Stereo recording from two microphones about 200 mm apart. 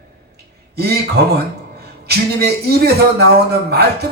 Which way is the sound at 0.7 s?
55° right (ahead or behind).